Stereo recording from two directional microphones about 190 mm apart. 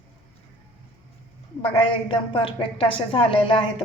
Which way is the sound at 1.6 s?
25° left (ahead or behind).